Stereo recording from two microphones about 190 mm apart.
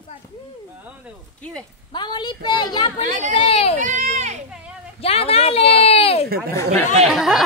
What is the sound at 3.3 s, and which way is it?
Speech, 30° left (ahead or behind).